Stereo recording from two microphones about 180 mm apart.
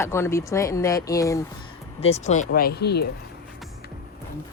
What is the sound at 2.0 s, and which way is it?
Speech, 35° left (ahead or behind).